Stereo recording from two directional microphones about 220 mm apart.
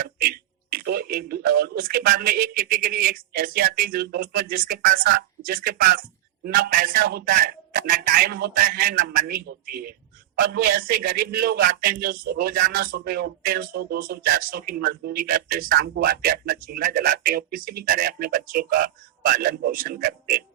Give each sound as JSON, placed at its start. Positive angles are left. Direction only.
{"t": 0.0, "sound": "a man's voice", "side_deg": -40}